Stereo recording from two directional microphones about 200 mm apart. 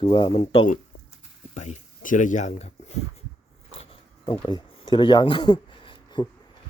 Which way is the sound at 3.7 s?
25° left (ahead or behind).